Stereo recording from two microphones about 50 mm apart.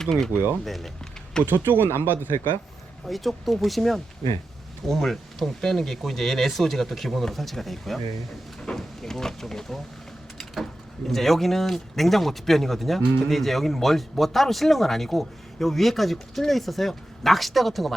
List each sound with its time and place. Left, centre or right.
0.0 s speech: centre
1.5 s speech: right
3.1 s speech: centre
10.3 s a sound: centre
11.1 s speech: centre